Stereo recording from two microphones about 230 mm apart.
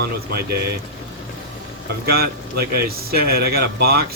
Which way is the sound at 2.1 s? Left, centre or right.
Right.